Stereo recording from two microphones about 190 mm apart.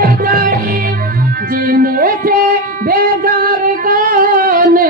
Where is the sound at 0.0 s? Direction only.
50° right (ahead or behind).